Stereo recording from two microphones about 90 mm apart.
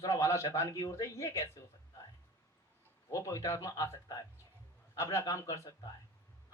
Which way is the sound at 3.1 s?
35° left (ahead or behind).